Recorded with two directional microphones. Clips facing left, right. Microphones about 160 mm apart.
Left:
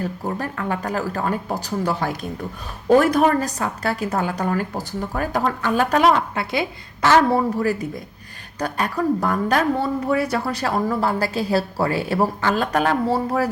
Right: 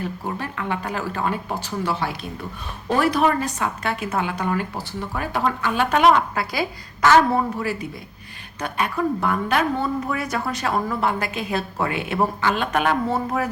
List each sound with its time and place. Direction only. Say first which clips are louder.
0.0 s speech: left 3 dB; 40° left (ahead or behind); by 7.2 s 25° left (ahead or behind)
7.6 s speech: left 5 dB; 40° left (ahead or behind)